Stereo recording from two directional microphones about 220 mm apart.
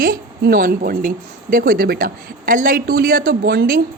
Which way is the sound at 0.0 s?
40° right (ahead or behind).